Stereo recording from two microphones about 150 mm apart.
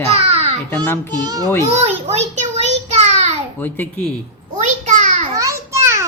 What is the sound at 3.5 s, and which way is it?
Speech, 15° left (ahead or behind).